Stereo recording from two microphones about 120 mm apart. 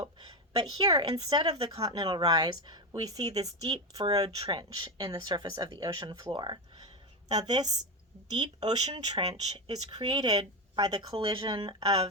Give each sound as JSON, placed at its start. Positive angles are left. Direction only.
{"t": 0.0, "sound": "a woman's voice", "side_deg": -35}